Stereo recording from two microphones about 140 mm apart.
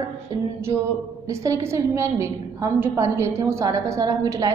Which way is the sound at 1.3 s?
20° right (ahead or behind).